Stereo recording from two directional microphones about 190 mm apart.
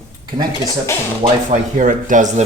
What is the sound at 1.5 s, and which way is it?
Speech, 45° right (ahead or behind).